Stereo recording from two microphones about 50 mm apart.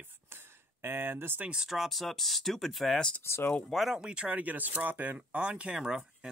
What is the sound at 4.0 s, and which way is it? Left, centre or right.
Speech, centre.